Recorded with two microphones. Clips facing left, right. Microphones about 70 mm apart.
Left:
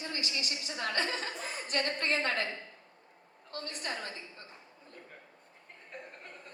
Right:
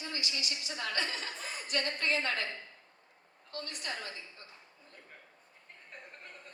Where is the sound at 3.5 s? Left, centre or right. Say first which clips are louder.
Left 2 dB; left.